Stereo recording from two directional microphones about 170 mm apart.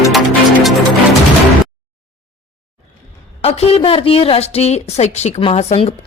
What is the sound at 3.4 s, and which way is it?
A woman's voice, 35° left (ahead or behind).